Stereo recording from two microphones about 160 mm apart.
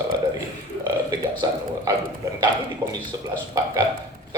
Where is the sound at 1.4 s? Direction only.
20° right (ahead or behind).